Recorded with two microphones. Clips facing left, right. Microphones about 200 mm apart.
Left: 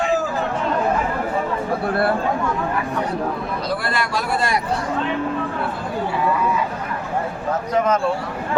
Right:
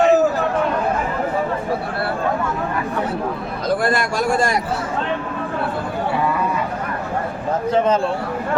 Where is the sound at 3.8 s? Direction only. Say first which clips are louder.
Right 5 dB; 50° right (ahead or behind).